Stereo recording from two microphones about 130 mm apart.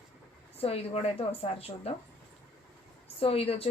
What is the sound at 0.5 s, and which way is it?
Speech, 50° left (ahead or behind).